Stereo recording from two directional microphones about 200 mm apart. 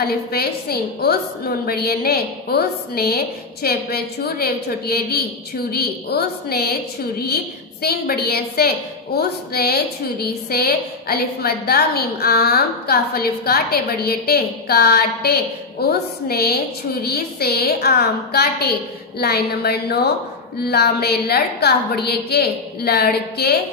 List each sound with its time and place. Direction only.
0.0 s a woman's voice: 50° left (ahead or behind)